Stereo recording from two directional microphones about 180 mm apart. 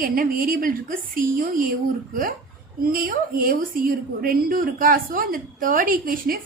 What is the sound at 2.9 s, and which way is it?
A woman's voice, 50° right (ahead or behind).